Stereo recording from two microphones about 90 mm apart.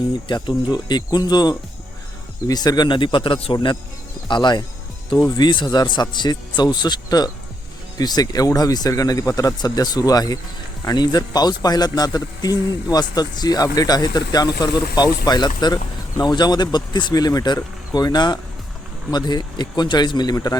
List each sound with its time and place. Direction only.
0.3 s a man's voice: 55° left (ahead or behind)
5.1 s speech: 40° left (ahead or behind)
5.5 s a man's voice: 55° left (ahead or behind)